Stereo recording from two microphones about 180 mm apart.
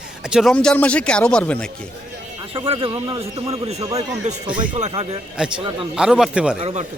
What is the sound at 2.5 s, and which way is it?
Speech, 30° right (ahead or behind).